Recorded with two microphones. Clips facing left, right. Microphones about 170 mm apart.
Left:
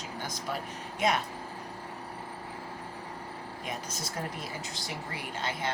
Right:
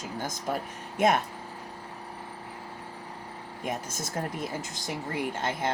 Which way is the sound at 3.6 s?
50° right (ahead or behind).